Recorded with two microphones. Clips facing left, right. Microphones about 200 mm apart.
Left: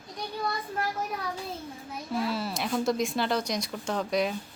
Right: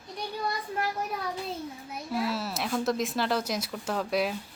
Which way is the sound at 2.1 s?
5° right (ahead or behind).